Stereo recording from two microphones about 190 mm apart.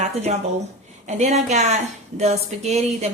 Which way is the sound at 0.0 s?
35° right (ahead or behind).